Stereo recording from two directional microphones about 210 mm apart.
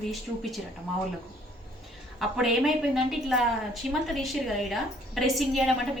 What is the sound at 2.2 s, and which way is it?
A woman's voice, centre (ahead or behind).